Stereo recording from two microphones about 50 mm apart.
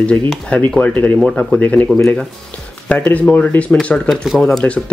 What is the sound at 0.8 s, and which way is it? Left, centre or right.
Speech, left.